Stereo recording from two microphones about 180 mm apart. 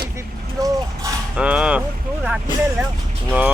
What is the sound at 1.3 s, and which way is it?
Speech, 5° right (ahead or behind).